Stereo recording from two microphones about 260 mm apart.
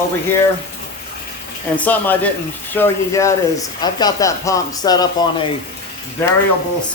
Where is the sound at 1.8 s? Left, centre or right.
Centre.